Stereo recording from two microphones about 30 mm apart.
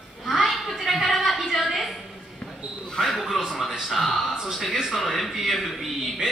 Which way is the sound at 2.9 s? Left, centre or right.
Centre.